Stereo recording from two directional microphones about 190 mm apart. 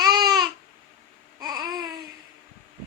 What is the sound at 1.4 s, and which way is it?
Babbling, 20° right (ahead or behind).